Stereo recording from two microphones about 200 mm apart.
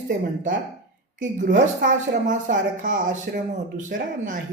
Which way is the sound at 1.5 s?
45° right (ahead or behind).